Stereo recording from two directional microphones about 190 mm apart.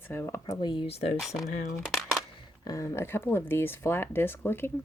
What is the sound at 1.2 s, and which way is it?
Speech, centre (ahead or behind).